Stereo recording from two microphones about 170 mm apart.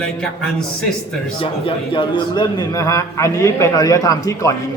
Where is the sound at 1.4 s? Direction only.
30° left (ahead or behind).